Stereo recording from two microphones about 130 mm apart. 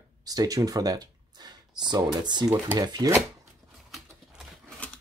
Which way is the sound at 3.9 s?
Centre (ahead or behind).